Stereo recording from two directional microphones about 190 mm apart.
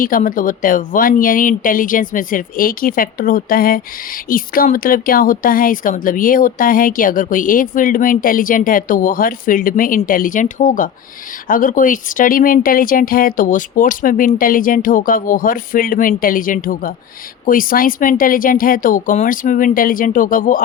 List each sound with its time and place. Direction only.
0.0 s a woman's voice: 45° left (ahead or behind)